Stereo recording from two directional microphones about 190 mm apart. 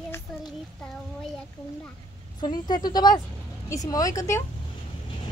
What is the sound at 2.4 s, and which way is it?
A woman's voice, 20° left (ahead or behind).